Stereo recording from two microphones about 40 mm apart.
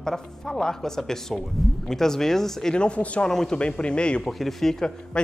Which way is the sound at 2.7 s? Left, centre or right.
Left.